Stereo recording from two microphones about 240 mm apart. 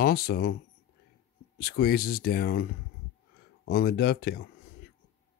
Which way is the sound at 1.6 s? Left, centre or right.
Left.